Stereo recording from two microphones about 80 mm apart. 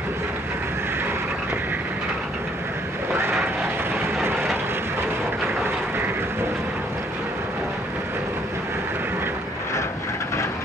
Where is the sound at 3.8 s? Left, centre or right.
Right.